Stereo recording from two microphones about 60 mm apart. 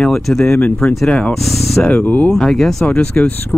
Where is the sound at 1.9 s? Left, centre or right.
Left.